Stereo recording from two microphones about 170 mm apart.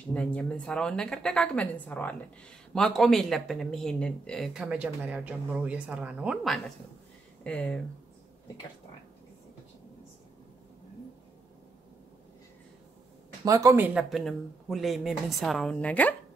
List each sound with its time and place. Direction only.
0.1 s speech: 5° left (ahead or behind)
13.5 s speech: 20° right (ahead or behind); by 16.2 s 10° left (ahead or behind)